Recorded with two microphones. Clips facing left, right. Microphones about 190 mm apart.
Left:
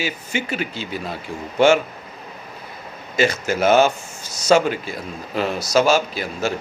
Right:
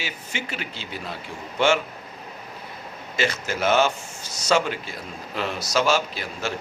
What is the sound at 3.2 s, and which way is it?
A man's voice, 45° left (ahead or behind).